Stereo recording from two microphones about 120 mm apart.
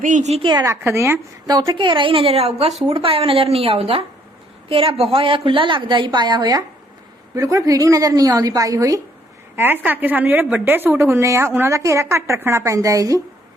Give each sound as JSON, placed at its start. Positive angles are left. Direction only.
{"t": 0.0, "sound": "a woman's voice", "side_deg": -80}
{"t": 0.6, "sound": "a woman's voice", "side_deg": -25}
{"t": 1.5, "sound": "a woman's voice", "side_deg": -35}
{"t": 9.6, "sound": "a woman's voice", "side_deg": -15}